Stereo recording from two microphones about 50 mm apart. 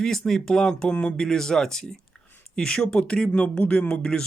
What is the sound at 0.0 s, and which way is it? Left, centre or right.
Speech, centre.